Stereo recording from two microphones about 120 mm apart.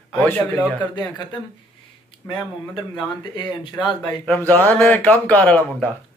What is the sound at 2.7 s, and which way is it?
Speech, 35° left (ahead or behind).